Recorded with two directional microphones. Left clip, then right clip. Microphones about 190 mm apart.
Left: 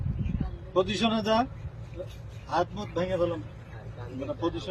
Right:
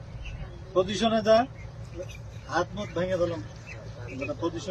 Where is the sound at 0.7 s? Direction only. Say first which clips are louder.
Right 2 dB; 25° left (ahead or behind).